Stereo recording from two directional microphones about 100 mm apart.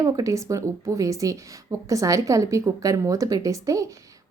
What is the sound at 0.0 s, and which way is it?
Speech, 35° right (ahead or behind).